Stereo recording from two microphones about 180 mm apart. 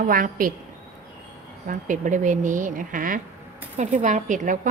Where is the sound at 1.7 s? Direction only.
45° right (ahead or behind).